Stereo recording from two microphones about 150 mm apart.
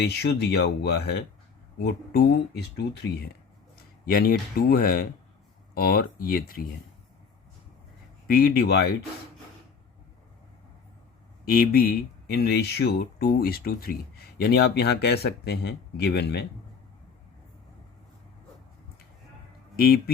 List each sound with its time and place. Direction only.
0.0 s speech: 90° left
4.1 s speech: 80° left
8.3 s speech: 70° left (ahead or behind); by 8.9 s 90° left
11.4 s speech: 80° left
19.7 s speech: 80° left